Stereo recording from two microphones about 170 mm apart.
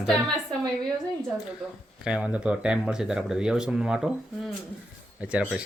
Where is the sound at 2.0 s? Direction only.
5° right (ahead or behind).